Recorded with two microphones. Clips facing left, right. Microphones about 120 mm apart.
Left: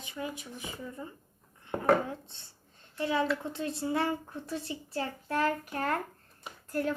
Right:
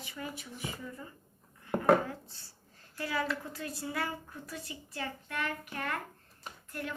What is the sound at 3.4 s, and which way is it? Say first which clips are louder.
A woman's voice: left 6 dB; 25° left (ahead or behind).